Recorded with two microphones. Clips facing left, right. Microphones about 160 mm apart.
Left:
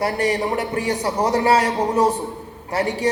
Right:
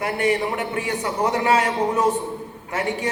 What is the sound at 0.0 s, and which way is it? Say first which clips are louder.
A man's voice: left 1 dB; 35° left (ahead or behind).